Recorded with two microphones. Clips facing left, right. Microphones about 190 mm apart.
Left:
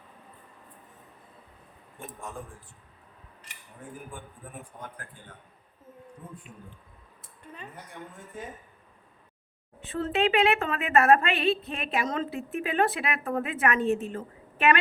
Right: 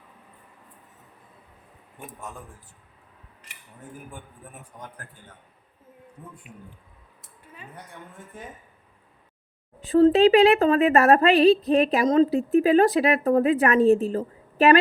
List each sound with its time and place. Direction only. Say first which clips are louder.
7.4 s a woman's voice: left 3 dB; 5° right (ahead or behind)
9.9 s a woman's voice: right 11 dB; 35° right (ahead or behind)